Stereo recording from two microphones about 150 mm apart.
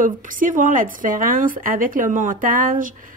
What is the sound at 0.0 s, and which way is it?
A woman's voice, 60° right (ahead or behind).